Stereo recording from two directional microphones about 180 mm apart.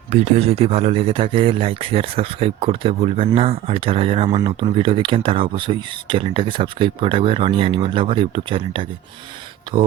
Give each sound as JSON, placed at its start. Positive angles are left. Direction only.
{"t": 0.1, "sound": "speech", "side_deg": -40}